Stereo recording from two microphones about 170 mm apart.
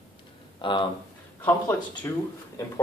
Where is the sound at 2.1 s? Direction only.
15° left (ahead or behind).